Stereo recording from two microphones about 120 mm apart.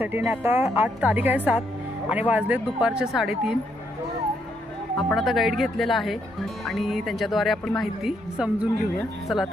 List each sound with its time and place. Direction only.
0.0 s speech: 15° right (ahead or behind); by 3.5 s centre (ahead or behind)
4.9 s speech: centre (ahead or behind)